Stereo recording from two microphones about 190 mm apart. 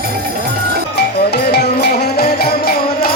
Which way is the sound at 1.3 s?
60° left (ahead or behind).